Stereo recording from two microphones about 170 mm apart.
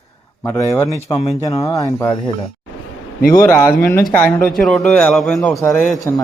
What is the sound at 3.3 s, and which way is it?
Speech, 10° left (ahead or behind).